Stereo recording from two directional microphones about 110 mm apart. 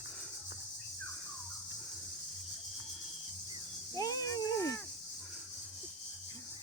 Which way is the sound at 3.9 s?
35° left (ahead or behind).